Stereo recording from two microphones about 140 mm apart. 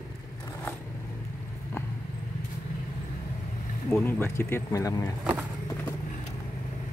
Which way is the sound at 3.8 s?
15° left (ahead or behind).